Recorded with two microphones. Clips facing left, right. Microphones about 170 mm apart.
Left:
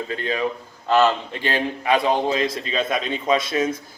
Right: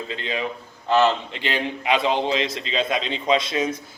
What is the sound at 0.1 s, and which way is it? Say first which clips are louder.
A man's voice: left 4 dB; 20° right (ahead or behind).